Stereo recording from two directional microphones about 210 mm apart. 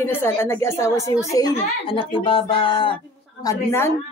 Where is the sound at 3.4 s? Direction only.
10° left (ahead or behind).